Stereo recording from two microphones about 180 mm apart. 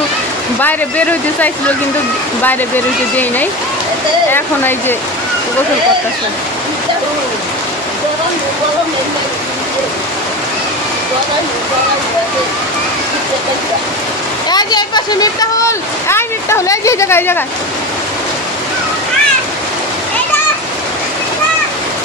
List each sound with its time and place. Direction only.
0.6 s speech: 10° left (ahead or behind)
4.3 s speech: 10° left (ahead or behind)
14.5 s speech: 20° left (ahead or behind)